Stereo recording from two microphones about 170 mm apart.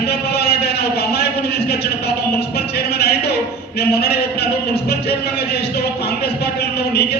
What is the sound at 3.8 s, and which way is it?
Speech, 70° left (ahead or behind).